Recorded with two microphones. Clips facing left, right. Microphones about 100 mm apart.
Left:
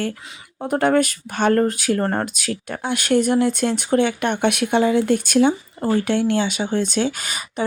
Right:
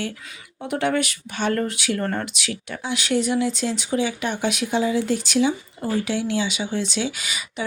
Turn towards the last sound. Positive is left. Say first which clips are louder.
# left 4 dB
turn(degrees=45)  # may be behind; listen again after turning